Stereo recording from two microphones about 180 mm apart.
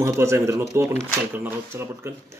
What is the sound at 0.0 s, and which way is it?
Speech, 15° right (ahead or behind).